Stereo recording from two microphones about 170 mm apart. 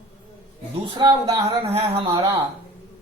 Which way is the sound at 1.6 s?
35° right (ahead or behind).